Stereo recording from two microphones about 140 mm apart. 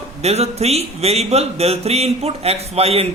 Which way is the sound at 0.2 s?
50° right (ahead or behind).